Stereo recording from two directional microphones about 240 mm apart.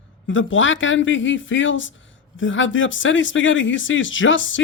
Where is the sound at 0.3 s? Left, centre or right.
Left.